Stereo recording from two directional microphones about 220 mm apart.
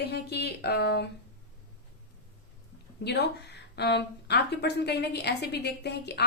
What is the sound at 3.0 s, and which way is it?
A woman's voice, 50° left (ahead or behind).